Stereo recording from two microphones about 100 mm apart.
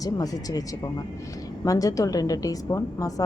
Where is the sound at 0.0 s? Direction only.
40° left (ahead or behind).